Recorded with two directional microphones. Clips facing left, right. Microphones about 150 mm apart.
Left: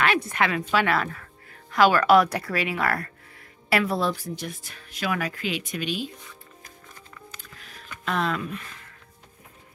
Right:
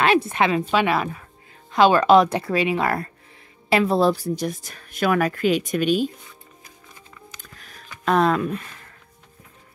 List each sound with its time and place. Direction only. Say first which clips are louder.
0.3 s speech: right 4 dB; 25° right (ahead or behind); by 6.0 s 45° right (ahead or behind)
8.0 s speech: right 8 dB; 45° right (ahead or behind)